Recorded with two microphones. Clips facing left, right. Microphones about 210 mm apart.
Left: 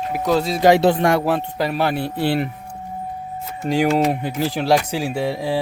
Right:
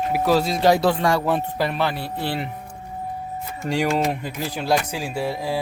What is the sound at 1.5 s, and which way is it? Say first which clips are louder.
Speech: left 2 dB; centre (ahead or behind).